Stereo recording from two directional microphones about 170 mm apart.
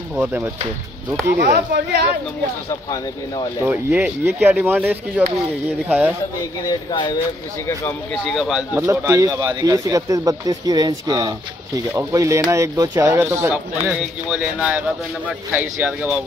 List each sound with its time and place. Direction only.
0.1 s speech: 10° right (ahead or behind)
1.2 s speech: 65° right (ahead or behind)
3.6 s speech: 10° right (ahead or behind)
6.6 s speech: 25° left (ahead or behind)
8.3 s speech: centre (ahead or behind)
8.9 s speech: 15° right (ahead or behind)